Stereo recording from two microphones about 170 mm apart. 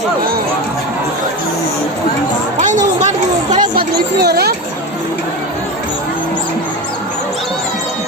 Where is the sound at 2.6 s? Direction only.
45° right (ahead or behind).